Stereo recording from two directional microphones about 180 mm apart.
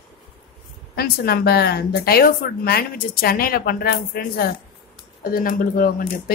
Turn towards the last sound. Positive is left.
turn(degrees=50)  # may be behind; listen again after turning